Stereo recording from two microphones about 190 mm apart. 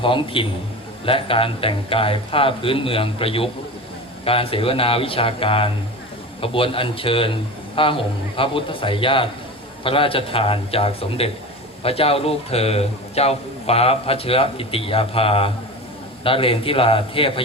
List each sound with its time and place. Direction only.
0.0 s a man's voice: 25° left (ahead or behind)